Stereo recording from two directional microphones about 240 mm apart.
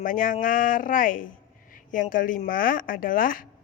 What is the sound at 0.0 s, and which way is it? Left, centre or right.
A woman's voice, left.